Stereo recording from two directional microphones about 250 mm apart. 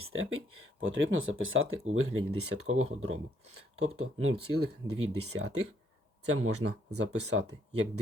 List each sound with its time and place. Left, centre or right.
0.0 s speech: right